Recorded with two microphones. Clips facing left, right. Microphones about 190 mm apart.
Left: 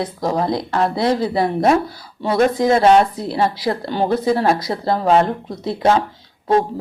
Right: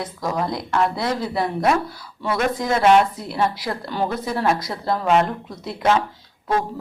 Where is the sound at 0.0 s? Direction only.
30° left (ahead or behind).